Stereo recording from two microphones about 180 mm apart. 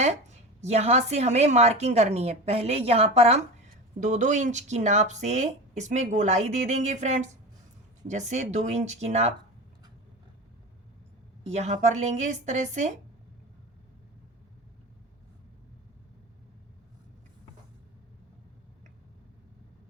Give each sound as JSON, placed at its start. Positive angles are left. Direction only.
{"t": 0.6, "sound": "speech", "side_deg": -35}
{"t": 11.5, "sound": "speech", "side_deg": -40}